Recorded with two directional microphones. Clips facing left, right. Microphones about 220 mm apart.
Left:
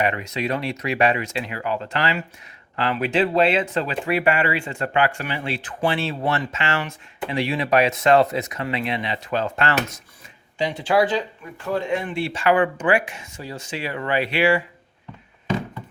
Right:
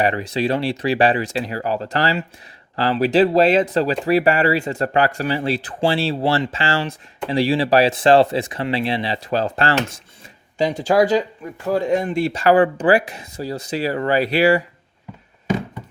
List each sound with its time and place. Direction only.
0.0 s speech: 35° right (ahead or behind)